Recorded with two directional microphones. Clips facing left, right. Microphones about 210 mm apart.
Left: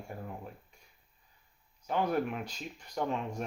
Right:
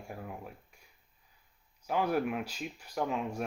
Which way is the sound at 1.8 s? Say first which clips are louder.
Right 1 dB; 5° right (ahead or behind).